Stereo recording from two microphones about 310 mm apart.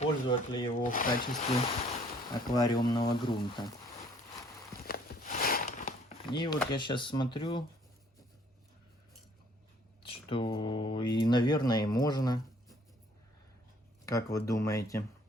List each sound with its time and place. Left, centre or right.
0.0 s speech: centre
1.9 s speech: centre
4.7 s a sound: left
6.3 s speech: centre
10.0 s speech: centre
14.0 s speech: centre